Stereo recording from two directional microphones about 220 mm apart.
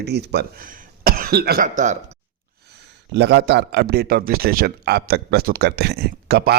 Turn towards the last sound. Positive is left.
turn(degrees=-45)  # may be behind; listen again after turning